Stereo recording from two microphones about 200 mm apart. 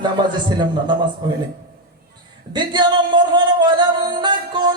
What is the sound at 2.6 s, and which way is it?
Music, 20° right (ahead or behind).